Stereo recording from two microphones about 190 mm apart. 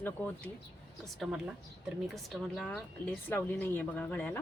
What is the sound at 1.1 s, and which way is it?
Speech, centre (ahead or behind).